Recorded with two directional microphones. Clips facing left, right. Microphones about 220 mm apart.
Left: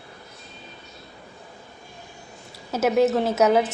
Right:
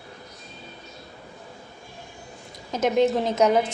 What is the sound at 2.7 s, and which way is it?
Speech, 5° left (ahead or behind).